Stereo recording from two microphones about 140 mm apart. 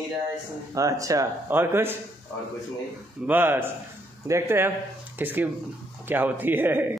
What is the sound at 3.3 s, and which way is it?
A man's voice, 15° right (ahead or behind).